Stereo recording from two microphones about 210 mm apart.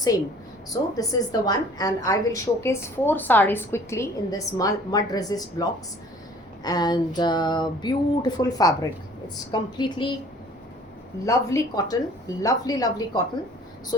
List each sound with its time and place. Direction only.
0.7 s a woman's voice: 15° left (ahead or behind)
6.6 s a sound: 20° left (ahead or behind)
11.3 s a woman's voice: 15° left (ahead or behind)